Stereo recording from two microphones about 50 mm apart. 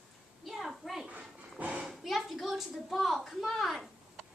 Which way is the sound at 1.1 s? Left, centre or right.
Right.